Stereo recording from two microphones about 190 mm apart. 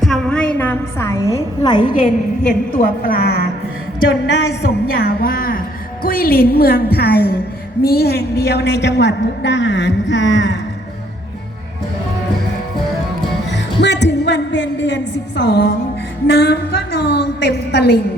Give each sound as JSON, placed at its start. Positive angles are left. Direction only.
{"t": 0.0, "sound": "a sound", "side_deg": 5}
{"t": 1.6, "sound": "a woman's voice", "side_deg": 25}
{"t": 2.5, "sound": "a woman's voice", "side_deg": 50}
{"t": 4.3, "sound": "a woman's voice", "side_deg": 65}
{"t": 13.5, "sound": "music", "side_deg": 65}
{"t": 16.2, "sound": "a woman's voice", "side_deg": 60}